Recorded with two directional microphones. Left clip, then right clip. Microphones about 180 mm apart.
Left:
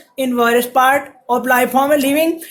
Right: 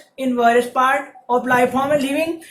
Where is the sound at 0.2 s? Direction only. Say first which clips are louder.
Left 1 dB; 55° left (ahead or behind).